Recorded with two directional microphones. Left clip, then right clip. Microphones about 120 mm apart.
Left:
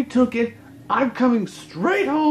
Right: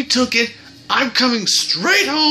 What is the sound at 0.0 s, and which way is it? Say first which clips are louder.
Speech: right 4 dB; 5° left (ahead or behind).